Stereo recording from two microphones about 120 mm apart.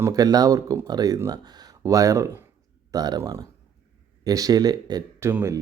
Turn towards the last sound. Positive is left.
turn(degrees=-25)  # may be behind; listen again after turning